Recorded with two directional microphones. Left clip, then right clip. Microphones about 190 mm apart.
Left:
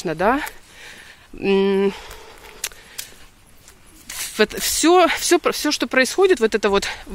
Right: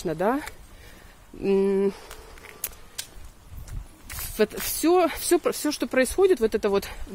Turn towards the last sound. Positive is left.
turn(degrees=20)  # may be behind; listen again after turning